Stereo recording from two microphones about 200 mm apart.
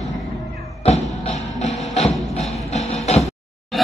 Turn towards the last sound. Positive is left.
turn(degrees=35)  # may be behind; listen again after turning